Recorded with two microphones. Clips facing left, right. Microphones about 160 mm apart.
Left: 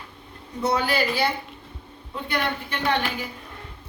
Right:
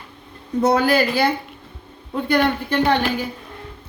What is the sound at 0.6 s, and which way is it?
Speech, 45° right (ahead or behind).